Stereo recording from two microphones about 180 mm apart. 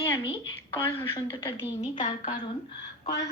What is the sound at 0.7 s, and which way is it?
Speech, 10° left (ahead or behind).